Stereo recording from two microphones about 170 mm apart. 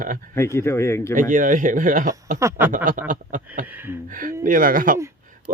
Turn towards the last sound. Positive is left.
turn(degrees=-55)  # may be behind; listen again after turning